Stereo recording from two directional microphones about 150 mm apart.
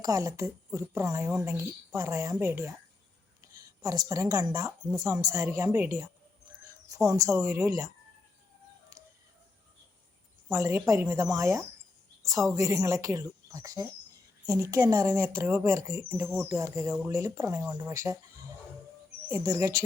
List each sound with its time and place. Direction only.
0.0 s a woman's voice: 20° right (ahead or behind)
10.5 s a woman's voice: 15° right (ahead or behind)
19.3 s a woman's voice: 20° right (ahead or behind)